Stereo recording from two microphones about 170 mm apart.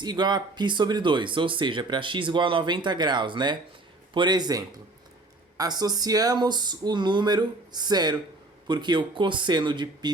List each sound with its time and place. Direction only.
0.0 s speech: 25° right (ahead or behind)